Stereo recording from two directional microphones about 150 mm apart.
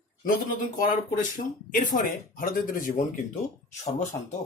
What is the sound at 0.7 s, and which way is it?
Speech, 60° left (ahead or behind).